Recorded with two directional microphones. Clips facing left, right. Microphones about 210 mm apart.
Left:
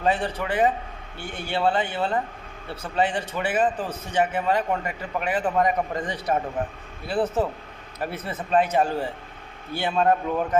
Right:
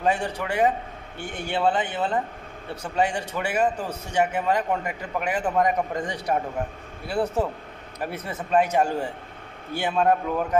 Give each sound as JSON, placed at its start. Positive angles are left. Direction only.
{"t": 0.0, "sound": "a man's voice", "side_deg": -15}
{"t": 9.8, "sound": "a man's voice", "side_deg": -5}